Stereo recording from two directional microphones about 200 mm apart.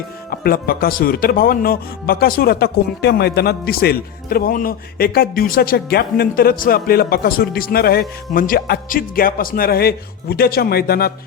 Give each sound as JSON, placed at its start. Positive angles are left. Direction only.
{"t": 0.3, "sound": "speech", "side_deg": 50}